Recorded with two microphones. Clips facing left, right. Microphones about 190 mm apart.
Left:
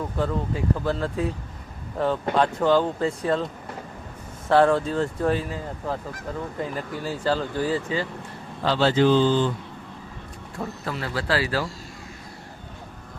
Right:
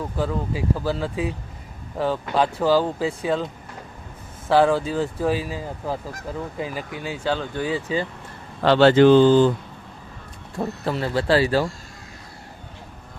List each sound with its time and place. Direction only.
0.2 s speech: 5° right (ahead or behind)
8.6 s speech: 65° right (ahead or behind); by 9.5 s 50° right (ahead or behind)
10.6 s speech: 25° right (ahead or behind)